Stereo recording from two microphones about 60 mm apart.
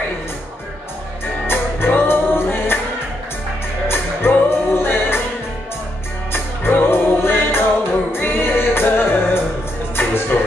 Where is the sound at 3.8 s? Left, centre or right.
Left.